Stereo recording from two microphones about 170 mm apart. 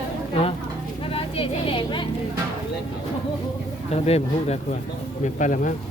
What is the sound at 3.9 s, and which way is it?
Speech, 40° left (ahead or behind).